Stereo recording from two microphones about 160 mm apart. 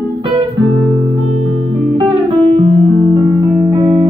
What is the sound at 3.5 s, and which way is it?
Music, 20° right (ahead or behind).